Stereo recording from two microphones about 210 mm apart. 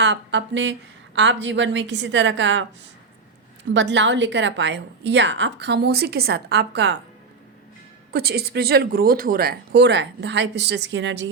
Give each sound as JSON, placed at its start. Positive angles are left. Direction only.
{"t": 0.0, "sound": "a woman's voice", "side_deg": -60}
{"t": 8.1, "sound": "speech", "side_deg": -50}